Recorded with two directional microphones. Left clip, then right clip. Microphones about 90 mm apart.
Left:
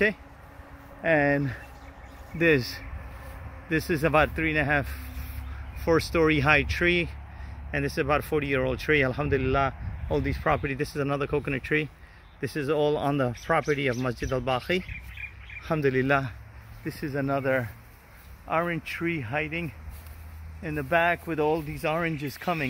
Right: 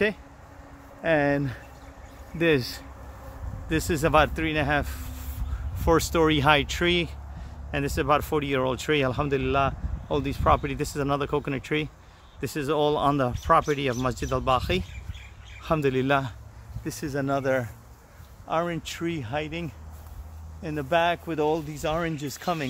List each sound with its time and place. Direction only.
1.0 s speech: 10° left (ahead or behind)
18.5 s speech: 30° left (ahead or behind)